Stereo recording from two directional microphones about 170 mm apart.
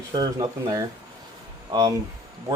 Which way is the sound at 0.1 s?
25° right (ahead or behind).